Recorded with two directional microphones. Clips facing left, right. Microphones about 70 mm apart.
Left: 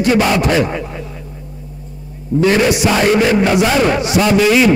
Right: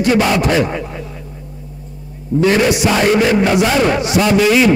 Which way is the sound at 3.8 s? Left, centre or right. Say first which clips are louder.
Even; centre.